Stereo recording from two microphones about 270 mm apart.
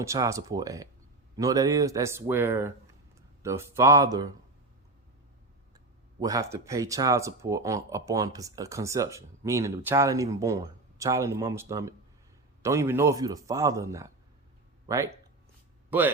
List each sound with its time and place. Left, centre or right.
0.0 s speech: centre
6.1 s a man's voice: centre